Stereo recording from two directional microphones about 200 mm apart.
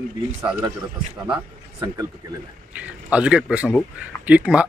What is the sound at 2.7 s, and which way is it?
Speech, 5° right (ahead or behind).